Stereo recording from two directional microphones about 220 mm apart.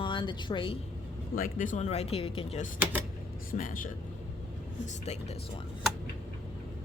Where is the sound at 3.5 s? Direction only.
40° left (ahead or behind).